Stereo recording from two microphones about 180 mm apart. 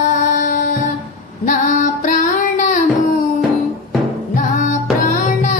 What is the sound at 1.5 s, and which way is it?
Female singing, 45° left (ahead or behind).